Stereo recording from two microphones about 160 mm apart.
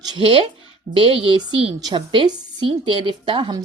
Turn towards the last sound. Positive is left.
turn(degrees=-30)  # may be behind; listen again after turning